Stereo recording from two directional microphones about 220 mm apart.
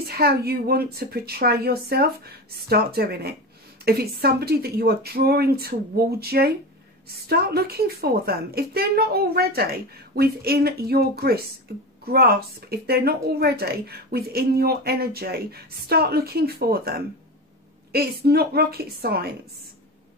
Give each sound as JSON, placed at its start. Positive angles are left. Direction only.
{"t": 0.2, "sound": "a woman's voice", "side_deg": -45}